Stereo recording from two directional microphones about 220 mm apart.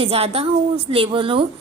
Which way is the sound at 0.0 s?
25° right (ahead or behind).